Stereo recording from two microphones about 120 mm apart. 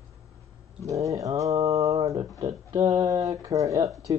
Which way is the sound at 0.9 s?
25° right (ahead or behind).